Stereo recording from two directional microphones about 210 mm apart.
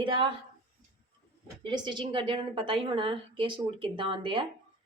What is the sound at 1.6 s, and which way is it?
A woman's voice, 20° right (ahead or behind).